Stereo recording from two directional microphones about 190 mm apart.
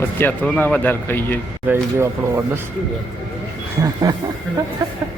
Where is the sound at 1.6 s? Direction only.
10° right (ahead or behind).